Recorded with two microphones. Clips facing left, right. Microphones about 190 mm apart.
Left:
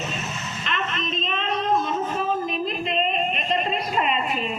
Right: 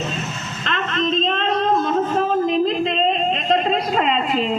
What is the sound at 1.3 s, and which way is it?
Singing, 90° right.